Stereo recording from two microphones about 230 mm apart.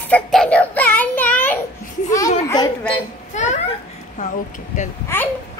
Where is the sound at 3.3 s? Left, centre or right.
Left.